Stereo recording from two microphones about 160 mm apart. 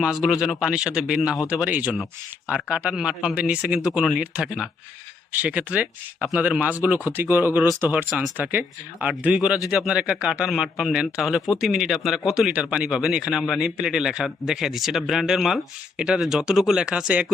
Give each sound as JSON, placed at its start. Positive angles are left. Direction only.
{"t": 0.0, "sound": "speech", "side_deg": -5}